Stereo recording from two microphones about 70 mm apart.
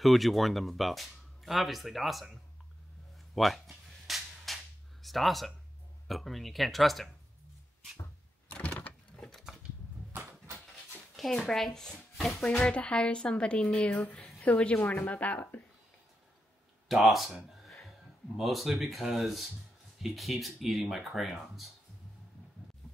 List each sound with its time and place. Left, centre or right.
0.0 s speech: centre
3.3 s speech: centre
4.1 s a sound: centre
4.5 s cap gun: centre
5.0 s speech: centre
8.5 s power windows: centre
9.1 s a sound: centre
11.1 s a woman's voice: centre; by 15.4 s left
16.8 s speech: centre